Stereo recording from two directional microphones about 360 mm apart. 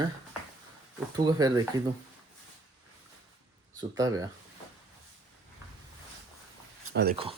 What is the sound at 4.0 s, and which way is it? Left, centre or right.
Speech, centre.